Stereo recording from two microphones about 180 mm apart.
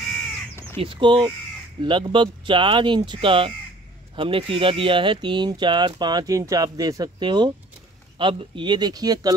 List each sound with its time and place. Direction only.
0.7 s speech: 25° right (ahead or behind)